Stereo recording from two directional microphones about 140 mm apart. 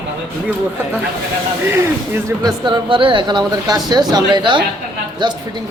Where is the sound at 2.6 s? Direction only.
35° right (ahead or behind).